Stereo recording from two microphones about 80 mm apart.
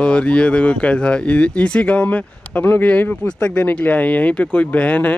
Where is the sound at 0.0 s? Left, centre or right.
Centre.